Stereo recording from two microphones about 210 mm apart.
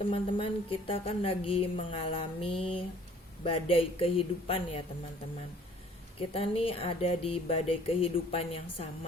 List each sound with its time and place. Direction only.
0.1 s a woman's voice: 25° left (ahead or behind)
6.1 s a woman's voice: 25° left (ahead or behind)